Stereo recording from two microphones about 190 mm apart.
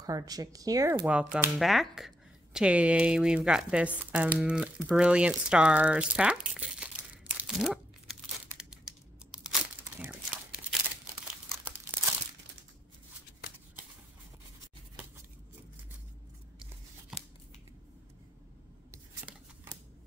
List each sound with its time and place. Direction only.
0.0 s speech: 20° right (ahead or behind)
1.0 s speech: 5° right (ahead or behind)
9.5 s crumpling: 5° right (ahead or behind)
18.9 s scissors: 10° right (ahead or behind)